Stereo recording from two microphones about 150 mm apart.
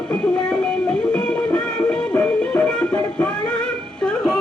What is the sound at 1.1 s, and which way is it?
Music, 10° left (ahead or behind).